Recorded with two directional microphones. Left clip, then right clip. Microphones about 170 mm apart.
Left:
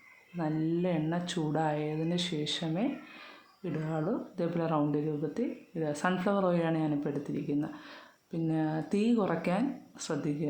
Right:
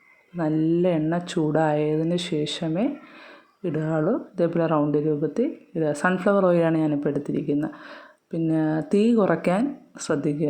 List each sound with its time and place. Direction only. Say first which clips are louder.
0.3 s speech: right 10 dB; 35° right (ahead or behind)